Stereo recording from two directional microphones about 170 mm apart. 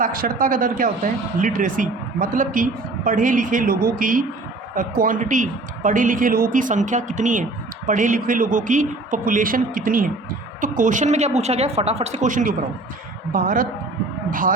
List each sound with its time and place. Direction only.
0.0 s a man's voice: 55° right (ahead or behind)